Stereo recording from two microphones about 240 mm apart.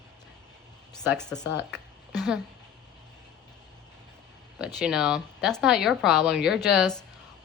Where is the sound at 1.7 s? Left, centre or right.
Centre.